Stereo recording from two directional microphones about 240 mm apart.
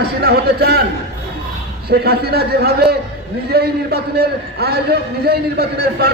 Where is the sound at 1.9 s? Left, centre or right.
Right.